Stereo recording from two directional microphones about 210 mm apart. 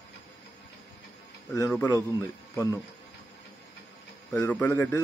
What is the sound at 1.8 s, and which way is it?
Speech, 15° left (ahead or behind).